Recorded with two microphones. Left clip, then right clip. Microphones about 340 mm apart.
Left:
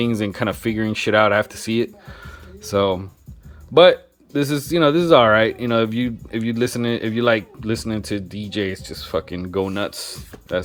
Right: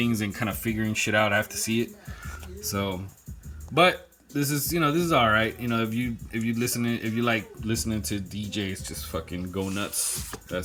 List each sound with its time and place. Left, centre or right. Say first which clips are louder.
0.0 s speech: left 7 dB; centre
2.6 s speech: left 12 dB; centre
4.4 s speech: left 8 dB; centre